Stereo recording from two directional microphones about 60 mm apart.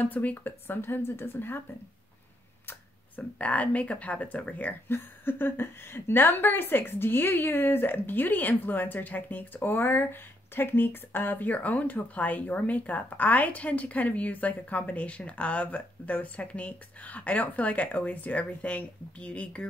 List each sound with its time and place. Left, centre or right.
0.0 s a woman's voice: left
3.2 s a woman's voice: left